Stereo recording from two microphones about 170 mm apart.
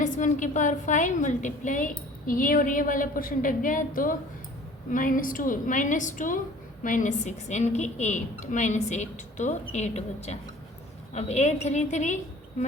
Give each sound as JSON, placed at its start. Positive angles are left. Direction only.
{"t": 0.0, "sound": "a woman's voice", "side_deg": 50}